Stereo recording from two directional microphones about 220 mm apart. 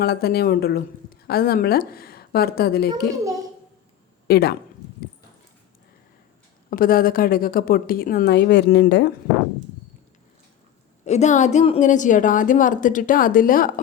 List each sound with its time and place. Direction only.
0.0 s a woman's voice: 45° left (ahead or behind)
4.3 s a woman's voice: 45° left (ahead or behind)
6.7 s a woman's voice: 40° left (ahead or behind)
11.0 s a woman's voice: 30° left (ahead or behind)